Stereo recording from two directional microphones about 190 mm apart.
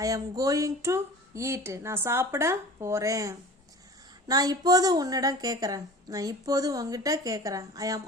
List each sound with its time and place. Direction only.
0.0 s a woman's voice: 20° right (ahead or behind)